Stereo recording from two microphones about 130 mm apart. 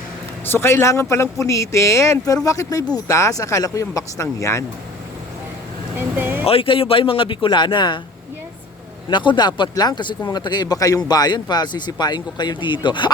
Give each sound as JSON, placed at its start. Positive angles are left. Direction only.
{"t": 0.4, "sound": "speech", "side_deg": 20}
{"t": 6.1, "sound": "speech", "side_deg": -15}
{"t": 6.4, "sound": "speech", "side_deg": 45}
{"t": 9.0, "sound": "speech", "side_deg": 35}